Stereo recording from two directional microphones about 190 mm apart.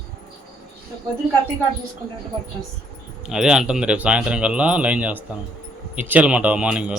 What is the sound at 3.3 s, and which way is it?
Speech, 5° right (ahead or behind).